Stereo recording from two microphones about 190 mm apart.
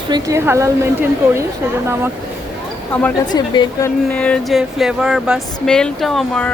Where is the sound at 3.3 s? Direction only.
20° left (ahead or behind).